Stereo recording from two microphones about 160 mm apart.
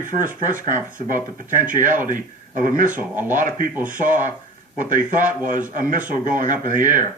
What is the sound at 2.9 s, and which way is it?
Speech, 10° right (ahead or behind).